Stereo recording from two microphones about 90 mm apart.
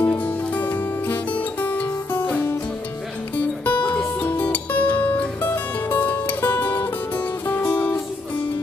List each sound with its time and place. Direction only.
0.0 s music: 20° left (ahead or behind)